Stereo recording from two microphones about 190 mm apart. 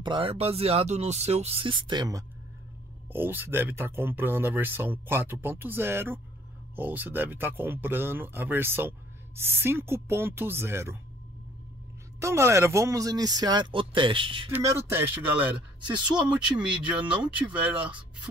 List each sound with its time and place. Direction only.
0.0 s speech: 25° right (ahead or behind)
12.2 s speech: 15° right (ahead or behind)
14.5 s speech: 10° right (ahead or behind)